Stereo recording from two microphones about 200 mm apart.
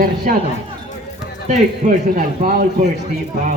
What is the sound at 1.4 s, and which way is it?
Speech, 40° right (ahead or behind).